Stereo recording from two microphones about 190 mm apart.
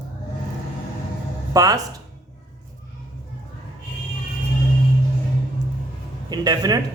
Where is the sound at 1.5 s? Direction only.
20° right (ahead or behind).